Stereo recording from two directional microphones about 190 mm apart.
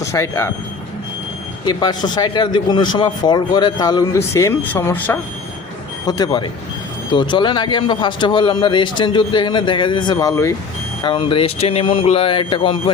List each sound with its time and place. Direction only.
0.0 s speech: 15° left (ahead or behind)
1.6 s speech: 20° left (ahead or behind)
11.0 s speech: 25° left (ahead or behind)